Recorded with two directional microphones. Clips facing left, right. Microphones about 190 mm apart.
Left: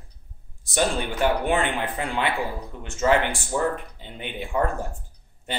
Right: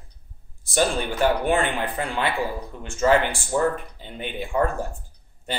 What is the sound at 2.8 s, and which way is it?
Speech, 20° left (ahead or behind).